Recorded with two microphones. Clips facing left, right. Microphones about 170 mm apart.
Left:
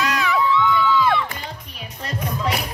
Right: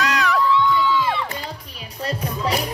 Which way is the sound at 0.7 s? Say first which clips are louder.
Left 2 dB; 60° left (ahead or behind).